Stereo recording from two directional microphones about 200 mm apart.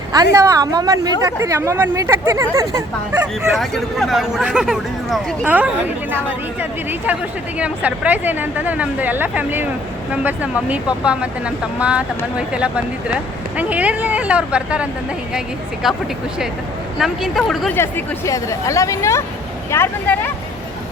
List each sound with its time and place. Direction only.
0.3 s speech: 15° right (ahead or behind)
7.6 s speech: 5° right (ahead or behind)
17.0 s speech: centre (ahead or behind)
17.7 s speech: 15° left (ahead or behind)